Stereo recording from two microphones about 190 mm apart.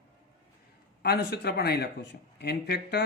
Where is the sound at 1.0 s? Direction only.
55° left (ahead or behind).